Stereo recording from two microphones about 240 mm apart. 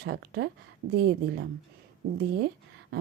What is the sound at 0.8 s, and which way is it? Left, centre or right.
Speech, right.